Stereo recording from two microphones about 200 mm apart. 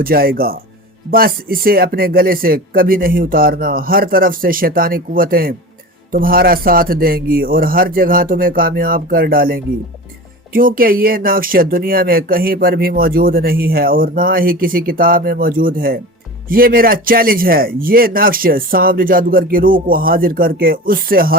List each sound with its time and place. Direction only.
0.0 s speech: 50° right (ahead or behind)